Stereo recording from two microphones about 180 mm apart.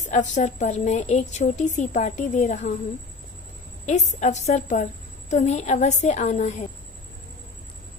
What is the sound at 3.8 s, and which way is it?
A woman's voice, 40° left (ahead or behind).